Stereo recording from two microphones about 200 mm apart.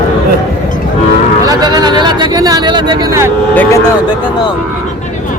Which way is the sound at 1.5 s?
20° right (ahead or behind).